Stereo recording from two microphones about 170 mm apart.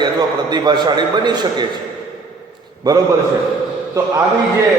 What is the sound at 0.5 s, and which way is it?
A man's voice, 25° right (ahead or behind).